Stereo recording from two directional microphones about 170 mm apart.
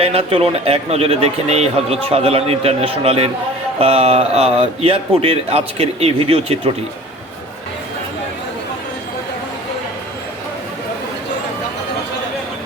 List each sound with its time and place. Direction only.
0.0 s speech: 35° right (ahead or behind)